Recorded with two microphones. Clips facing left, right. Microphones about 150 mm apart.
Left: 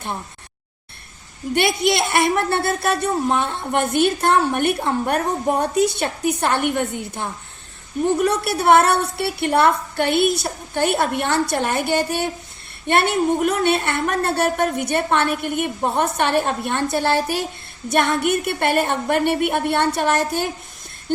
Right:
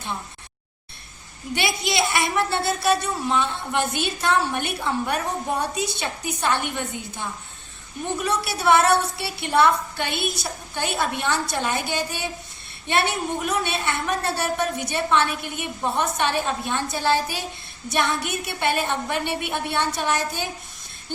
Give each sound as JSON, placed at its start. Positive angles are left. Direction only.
{"t": 1.5, "sound": "speech", "side_deg": 55}